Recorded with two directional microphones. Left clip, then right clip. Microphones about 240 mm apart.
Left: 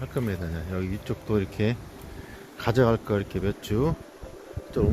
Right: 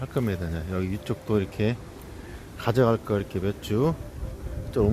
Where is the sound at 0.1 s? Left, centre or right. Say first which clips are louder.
Right 2 dB; centre.